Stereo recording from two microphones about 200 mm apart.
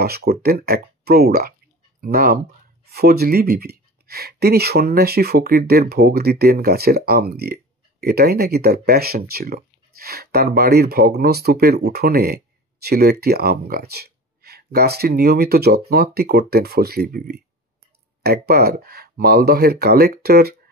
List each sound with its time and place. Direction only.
0.0 s speech: 50° right (ahead or behind)